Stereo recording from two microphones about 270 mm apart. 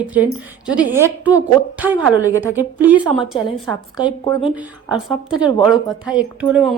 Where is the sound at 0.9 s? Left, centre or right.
Centre.